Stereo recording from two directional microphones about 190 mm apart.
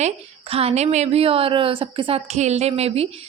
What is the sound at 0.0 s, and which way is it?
A woman's voice, 30° right (ahead or behind).